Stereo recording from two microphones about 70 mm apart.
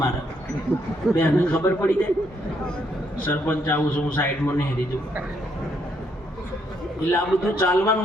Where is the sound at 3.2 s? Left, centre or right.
Left.